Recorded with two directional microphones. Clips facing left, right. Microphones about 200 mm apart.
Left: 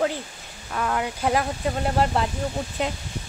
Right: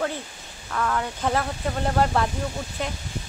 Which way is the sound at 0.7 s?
20° left (ahead or behind).